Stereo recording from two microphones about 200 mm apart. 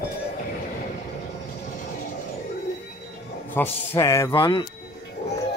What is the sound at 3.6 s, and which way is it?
Speech, 15° left (ahead or behind).